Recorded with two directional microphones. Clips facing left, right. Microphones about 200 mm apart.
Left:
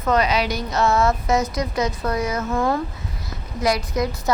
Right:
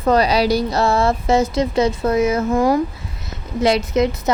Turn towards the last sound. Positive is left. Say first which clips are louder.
# right 5 dB
turn(degrees=-25)  # may be behind; listen again after turning